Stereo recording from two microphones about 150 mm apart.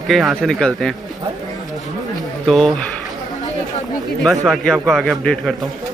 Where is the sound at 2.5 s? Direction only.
Centre (ahead or behind).